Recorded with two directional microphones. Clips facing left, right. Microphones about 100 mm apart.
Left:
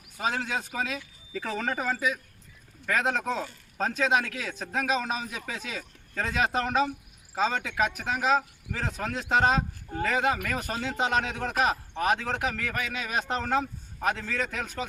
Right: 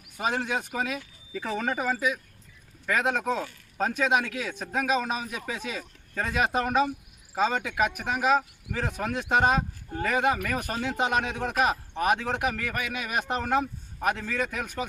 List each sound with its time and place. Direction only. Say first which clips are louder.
0.2 s speech: right 2 dB; 15° right (ahead or behind)